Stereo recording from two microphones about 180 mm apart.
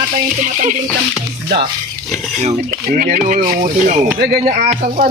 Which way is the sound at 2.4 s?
45° right (ahead or behind).